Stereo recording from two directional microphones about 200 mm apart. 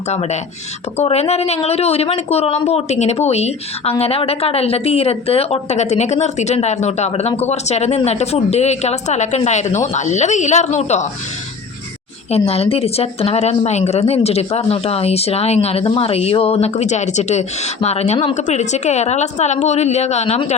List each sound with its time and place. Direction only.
0.1 s speech: 35° left (ahead or behind)
12.3 s speech: 30° left (ahead or behind)